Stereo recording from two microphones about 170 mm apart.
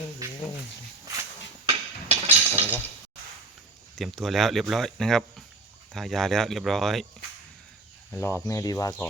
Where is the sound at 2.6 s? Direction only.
10° right (ahead or behind).